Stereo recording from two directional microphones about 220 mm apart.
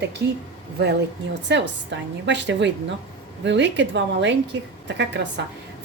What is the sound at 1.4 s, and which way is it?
A woman's voice, 55° right (ahead or behind).